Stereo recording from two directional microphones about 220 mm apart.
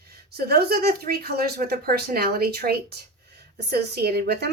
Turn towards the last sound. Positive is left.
turn(degrees=-50)  # may be behind; listen again after turning